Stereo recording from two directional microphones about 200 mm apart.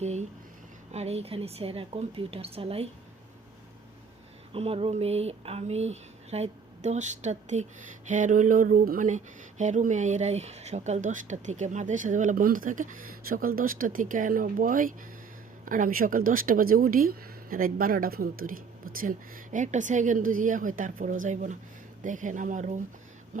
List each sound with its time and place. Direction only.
0.0 s a woman's voice: 35° right (ahead or behind)
4.5 s speech: 30° right (ahead or behind)